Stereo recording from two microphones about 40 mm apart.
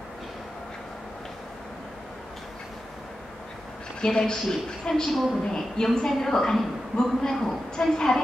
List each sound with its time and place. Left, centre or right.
4.0 s a man's voice: centre